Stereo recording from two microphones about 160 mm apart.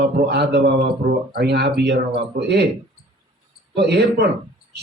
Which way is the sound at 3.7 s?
90° right.